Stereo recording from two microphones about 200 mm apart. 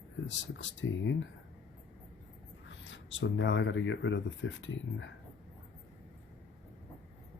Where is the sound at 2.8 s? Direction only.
70° left (ahead or behind).